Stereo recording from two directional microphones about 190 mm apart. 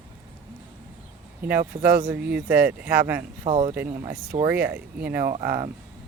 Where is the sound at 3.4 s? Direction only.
35° right (ahead or behind).